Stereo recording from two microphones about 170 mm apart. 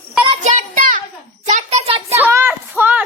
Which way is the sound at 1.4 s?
45° right (ahead or behind).